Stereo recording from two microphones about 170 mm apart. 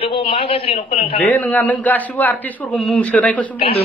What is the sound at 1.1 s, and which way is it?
A man's voice, 10° left (ahead or behind).